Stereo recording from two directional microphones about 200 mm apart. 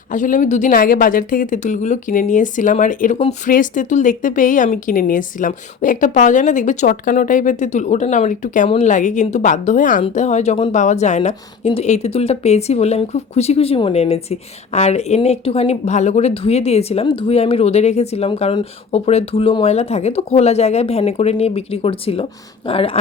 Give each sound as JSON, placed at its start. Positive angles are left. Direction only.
{"t": 0.1, "sound": "speech", "side_deg": 40}